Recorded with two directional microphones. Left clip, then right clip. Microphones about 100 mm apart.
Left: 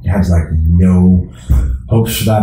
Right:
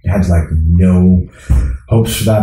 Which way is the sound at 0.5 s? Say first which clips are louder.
Even; 20° right (ahead or behind).